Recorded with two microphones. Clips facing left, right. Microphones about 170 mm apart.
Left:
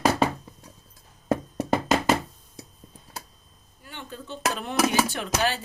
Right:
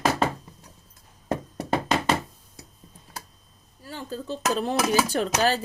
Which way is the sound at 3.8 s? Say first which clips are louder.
Right 6 dB; 35° right (ahead or behind).